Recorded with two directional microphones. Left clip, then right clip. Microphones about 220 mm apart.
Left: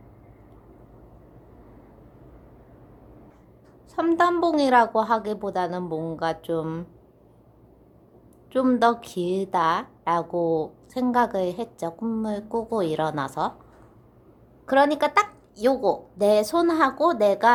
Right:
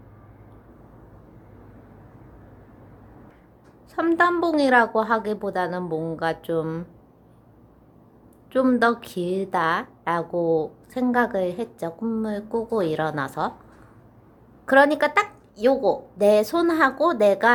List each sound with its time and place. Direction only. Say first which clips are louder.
3.9 s a woman's voice: right 1 dB; centre (ahead or behind)
8.5 s a woman's voice: right 1 dB; centre (ahead or behind)
14.7 s a woman's voice: right 3 dB; 5° right (ahead or behind)